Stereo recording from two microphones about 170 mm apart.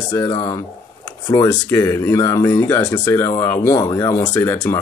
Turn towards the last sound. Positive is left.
turn(degrees=10)  # may be behind; listen again after turning